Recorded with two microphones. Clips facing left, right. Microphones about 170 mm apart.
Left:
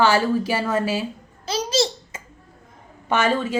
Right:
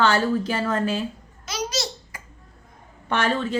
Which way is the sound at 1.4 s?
30° left (ahead or behind).